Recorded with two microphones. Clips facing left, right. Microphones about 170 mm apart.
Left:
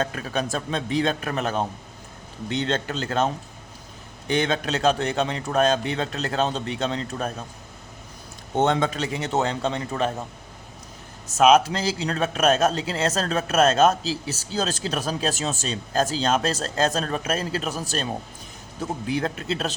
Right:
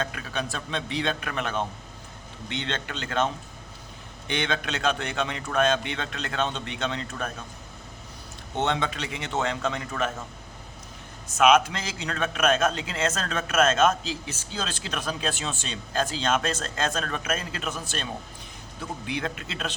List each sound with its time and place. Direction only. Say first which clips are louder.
0.0 s speech: left 5 dB; 40° left (ahead or behind)
4.3 s speech: left 5 dB; 35° left (ahead or behind)
8.5 s speech: left 6 dB; 45° left (ahead or behind)
11.3 s speech: left 3 dB; 35° left (ahead or behind)